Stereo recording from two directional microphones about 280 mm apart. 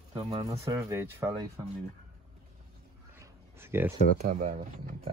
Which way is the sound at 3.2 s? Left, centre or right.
Centre.